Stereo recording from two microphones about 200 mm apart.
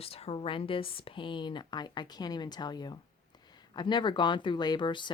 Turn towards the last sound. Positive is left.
turn(degrees=25)  # may be behind; listen again after turning